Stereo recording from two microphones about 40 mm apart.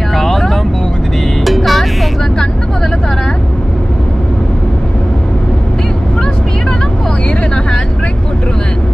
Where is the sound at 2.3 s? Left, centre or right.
Centre.